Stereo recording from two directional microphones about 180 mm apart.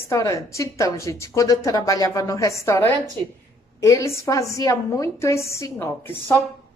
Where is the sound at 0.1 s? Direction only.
15° left (ahead or behind).